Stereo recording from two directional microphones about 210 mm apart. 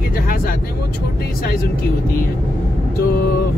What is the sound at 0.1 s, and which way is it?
Vehicle, 40° left (ahead or behind).